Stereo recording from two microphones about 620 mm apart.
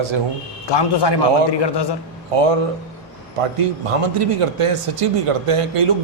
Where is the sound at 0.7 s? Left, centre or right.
Left.